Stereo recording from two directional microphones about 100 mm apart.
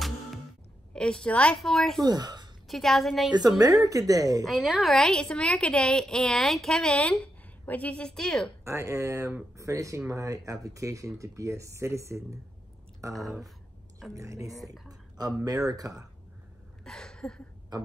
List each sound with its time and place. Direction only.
0.9 s a woman's voice: 10° left (ahead or behind)
2.0 s speech: 45° right (ahead or behind)
2.7 s a woman's voice: centre (ahead or behind)
3.3 s speech: 40° right (ahead or behind)
4.5 s a woman's voice: 5° right (ahead or behind)
8.6 s speech: 30° right (ahead or behind)
14.9 s a sound: 40° right (ahead or behind)
15.4 s speech: 40° right (ahead or behind)
16.8 s a sound: 10° left (ahead or behind)
17.7 s speech: 45° right (ahead or behind)